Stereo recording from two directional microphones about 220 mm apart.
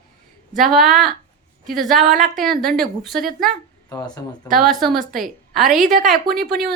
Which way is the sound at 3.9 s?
15° left (ahead or behind).